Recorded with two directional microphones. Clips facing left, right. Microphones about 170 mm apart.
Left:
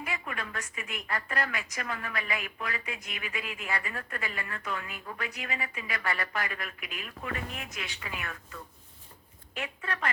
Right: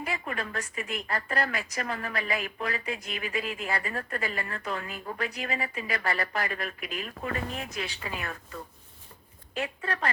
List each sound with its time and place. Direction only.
0.0 s a woman's voice: 35° right (ahead or behind)